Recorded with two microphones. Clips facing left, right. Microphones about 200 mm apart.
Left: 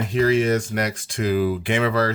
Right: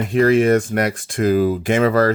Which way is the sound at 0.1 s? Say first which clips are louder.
Right 5 dB; 55° right (ahead or behind).